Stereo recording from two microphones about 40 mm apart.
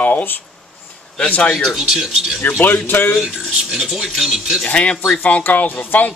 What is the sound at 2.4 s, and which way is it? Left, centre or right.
Speech, left.